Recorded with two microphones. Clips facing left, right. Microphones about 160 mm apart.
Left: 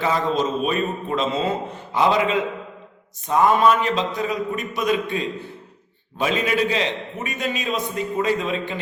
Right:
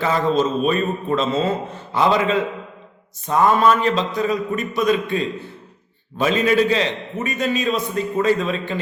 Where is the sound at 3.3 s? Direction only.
15° left (ahead or behind).